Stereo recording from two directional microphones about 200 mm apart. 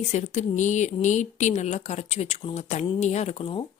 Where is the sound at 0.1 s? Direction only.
35° left (ahead or behind).